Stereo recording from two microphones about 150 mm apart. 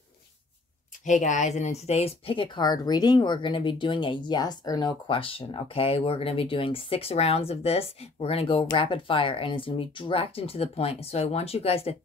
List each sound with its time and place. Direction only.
1.0 s speech: 55° left (ahead or behind)